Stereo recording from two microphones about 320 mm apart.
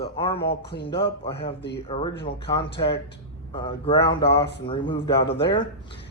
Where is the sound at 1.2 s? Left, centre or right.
Centre.